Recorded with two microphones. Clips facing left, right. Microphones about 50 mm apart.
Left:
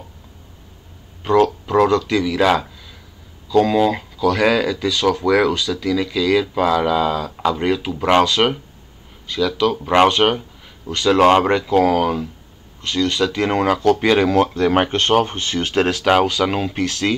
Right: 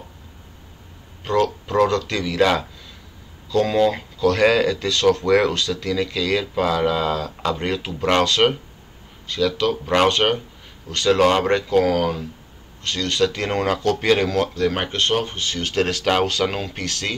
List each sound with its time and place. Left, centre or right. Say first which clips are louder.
1.2 s speech: left 5 dB; centre
3.6 s speech: left 2 dB; centre
9.6 s speech: left 5 dB; centre